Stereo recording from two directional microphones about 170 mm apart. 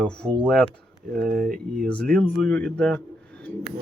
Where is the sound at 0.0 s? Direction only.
5° left (ahead or behind).